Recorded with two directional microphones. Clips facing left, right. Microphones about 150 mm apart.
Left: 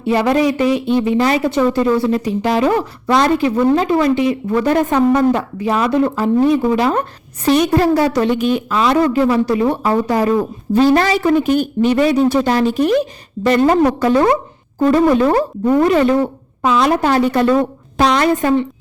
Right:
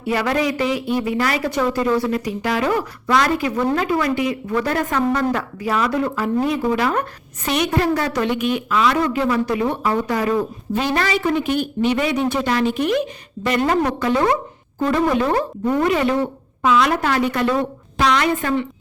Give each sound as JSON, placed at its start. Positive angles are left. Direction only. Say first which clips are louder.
{"t": 0.0, "sound": "speech", "louder": "left 6 dB", "side_deg": 25}